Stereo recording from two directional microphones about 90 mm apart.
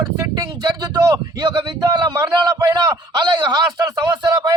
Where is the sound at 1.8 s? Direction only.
45° right (ahead or behind).